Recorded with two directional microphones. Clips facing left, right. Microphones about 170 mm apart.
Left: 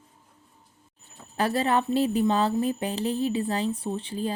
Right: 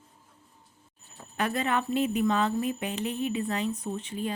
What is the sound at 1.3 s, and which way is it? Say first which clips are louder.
A woman's voice: left 4 dB; 35° left (ahead or behind).